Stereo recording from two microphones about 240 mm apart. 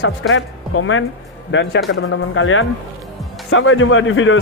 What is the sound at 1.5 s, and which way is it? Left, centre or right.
A man's voice, left.